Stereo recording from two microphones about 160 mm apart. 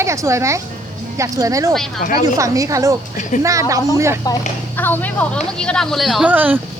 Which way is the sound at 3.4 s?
20° right (ahead or behind).